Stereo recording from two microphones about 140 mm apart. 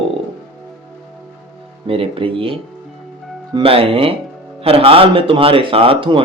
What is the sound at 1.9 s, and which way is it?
Speech, 40° right (ahead or behind).